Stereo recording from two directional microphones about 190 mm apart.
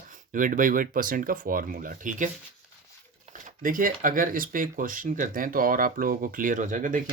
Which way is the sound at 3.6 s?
45° right (ahead or behind).